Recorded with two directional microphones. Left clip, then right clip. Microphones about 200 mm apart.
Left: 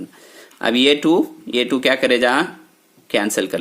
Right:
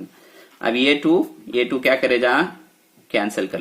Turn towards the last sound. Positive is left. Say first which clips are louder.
# left 3 dB
turn(degrees=35)  # may be behind; listen again after turning